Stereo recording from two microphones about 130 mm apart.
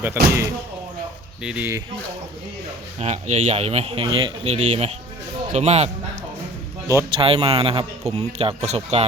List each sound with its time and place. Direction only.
0.0 s speech: 20° right (ahead or behind)
1.4 s speech: 5° right (ahead or behind)
3.0 s a man's voice: 55° right (ahead or behind)
7.1 s speech: 45° right (ahead or behind)